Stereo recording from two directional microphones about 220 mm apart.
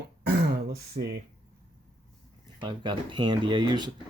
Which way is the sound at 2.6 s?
20° right (ahead or behind).